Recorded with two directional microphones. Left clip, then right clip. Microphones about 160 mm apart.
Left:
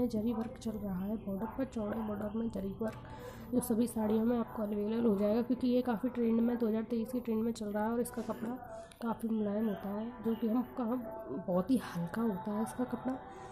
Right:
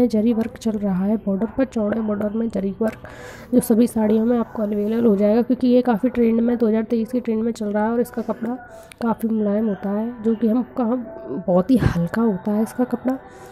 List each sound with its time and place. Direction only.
0.0 s a woman's voice: 35° right (ahead or behind)